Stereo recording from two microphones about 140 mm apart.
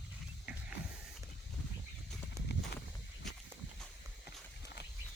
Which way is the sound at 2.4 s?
20° right (ahead or behind).